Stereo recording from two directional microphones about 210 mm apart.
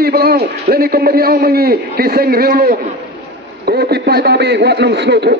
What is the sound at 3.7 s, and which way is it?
A man's voice, 50° right (ahead or behind).